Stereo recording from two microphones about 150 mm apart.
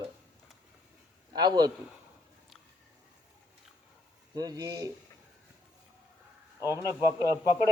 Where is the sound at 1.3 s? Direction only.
30° right (ahead or behind).